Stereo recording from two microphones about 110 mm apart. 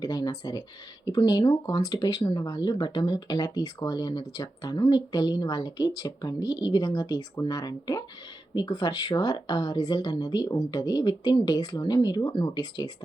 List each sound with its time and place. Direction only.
0.0 s speech: 35° left (ahead or behind)